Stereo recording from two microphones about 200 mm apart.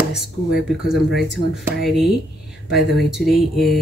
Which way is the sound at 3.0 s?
Centre (ahead or behind).